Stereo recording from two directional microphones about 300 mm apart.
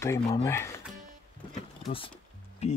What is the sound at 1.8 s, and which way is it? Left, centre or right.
Speech, centre.